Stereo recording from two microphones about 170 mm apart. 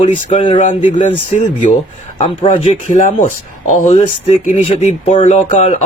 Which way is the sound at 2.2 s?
40° left (ahead or behind).